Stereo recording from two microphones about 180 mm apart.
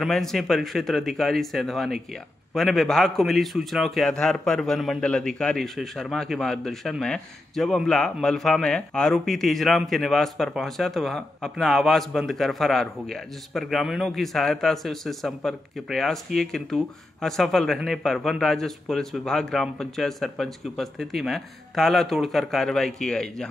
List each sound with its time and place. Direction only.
0.0 s a man's voice: centre (ahead or behind)